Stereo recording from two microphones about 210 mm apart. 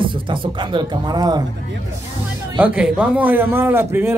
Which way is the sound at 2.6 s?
5° right (ahead or behind).